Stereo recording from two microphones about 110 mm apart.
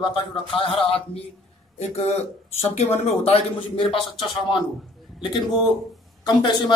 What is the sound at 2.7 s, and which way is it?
Speech, 70° left (ahead or behind).